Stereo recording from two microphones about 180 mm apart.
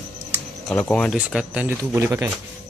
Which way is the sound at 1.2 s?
5° right (ahead or behind).